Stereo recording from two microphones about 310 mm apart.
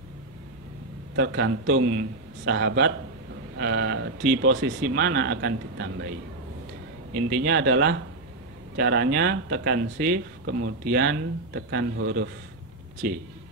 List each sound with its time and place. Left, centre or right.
1.1 s speech: right
7.2 s speech: right
8.7 s speech: right